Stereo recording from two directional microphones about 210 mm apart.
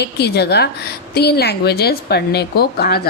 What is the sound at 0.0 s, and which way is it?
Speech, 50° left (ahead or behind).